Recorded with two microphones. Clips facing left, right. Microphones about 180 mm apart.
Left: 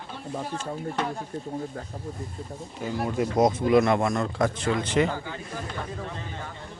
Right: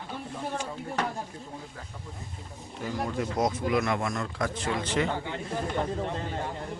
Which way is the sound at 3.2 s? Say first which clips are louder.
Left 7 dB; 25° left (ahead or behind).